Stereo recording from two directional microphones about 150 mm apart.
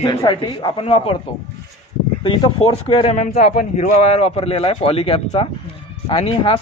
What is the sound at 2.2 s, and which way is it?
Speech, 35° left (ahead or behind).